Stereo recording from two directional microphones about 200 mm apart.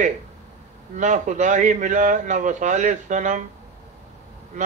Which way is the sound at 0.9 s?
40° right (ahead or behind).